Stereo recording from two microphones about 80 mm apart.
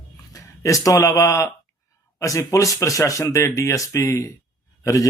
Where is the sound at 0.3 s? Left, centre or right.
Left.